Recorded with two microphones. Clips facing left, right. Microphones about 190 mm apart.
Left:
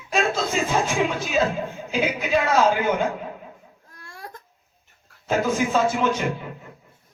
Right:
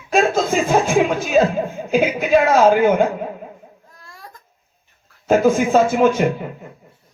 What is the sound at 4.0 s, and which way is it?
Baby cry, 60° left (ahead or behind).